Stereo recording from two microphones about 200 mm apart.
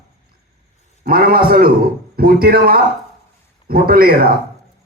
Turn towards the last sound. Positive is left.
turn(degrees=-50)  # may be behind; listen again after turning